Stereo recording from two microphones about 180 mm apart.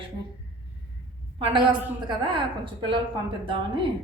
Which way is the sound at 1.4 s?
25° right (ahead or behind).